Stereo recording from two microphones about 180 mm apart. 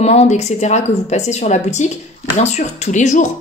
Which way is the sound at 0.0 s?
35° left (ahead or behind).